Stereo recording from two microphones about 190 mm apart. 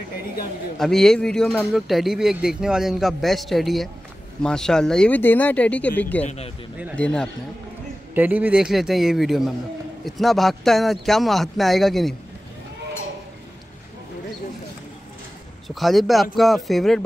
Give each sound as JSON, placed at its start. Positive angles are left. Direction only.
{"t": 0.7, "sound": "speech", "side_deg": 0}
{"t": 6.2, "sound": "speech", "side_deg": 35}
{"t": 7.0, "sound": "speech", "side_deg": 5}
{"t": 8.1, "sound": "speech", "side_deg": -10}
{"t": 15.7, "sound": "speech", "side_deg": 0}